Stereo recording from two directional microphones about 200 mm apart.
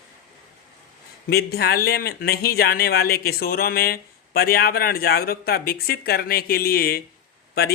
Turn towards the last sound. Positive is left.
turn(degrees=50)  # may be behind; listen again after turning